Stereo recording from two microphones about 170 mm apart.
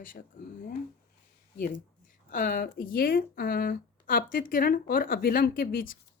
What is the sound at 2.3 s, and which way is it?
Speech, 50° left (ahead or behind).